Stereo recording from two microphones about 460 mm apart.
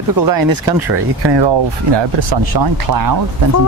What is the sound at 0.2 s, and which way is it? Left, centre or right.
Speech, right.